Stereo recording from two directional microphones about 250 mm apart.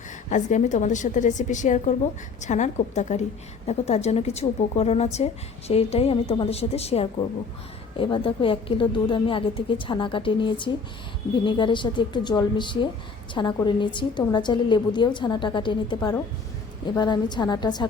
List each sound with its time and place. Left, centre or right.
0.3 s a woman's voice: left